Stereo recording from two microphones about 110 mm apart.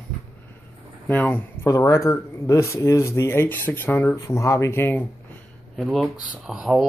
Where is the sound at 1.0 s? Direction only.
15° left (ahead or behind).